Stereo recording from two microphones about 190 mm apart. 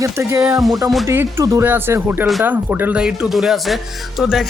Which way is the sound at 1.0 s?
10° right (ahead or behind).